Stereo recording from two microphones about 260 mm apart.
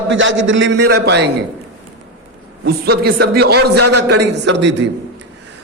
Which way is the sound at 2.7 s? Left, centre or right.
Right.